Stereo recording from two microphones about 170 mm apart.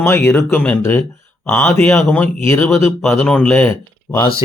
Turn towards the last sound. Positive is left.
turn(degrees=15)  # may be behind; listen again after turning